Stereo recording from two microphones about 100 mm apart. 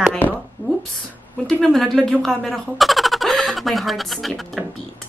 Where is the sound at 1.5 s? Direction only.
5° left (ahead or behind).